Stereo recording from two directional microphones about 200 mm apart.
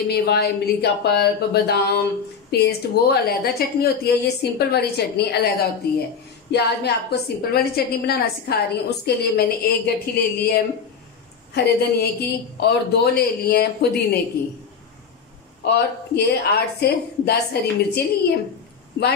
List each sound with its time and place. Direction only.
0.1 s a woman's voice: 55° left (ahead or behind)
15.6 s a woman's voice: 55° left (ahead or behind)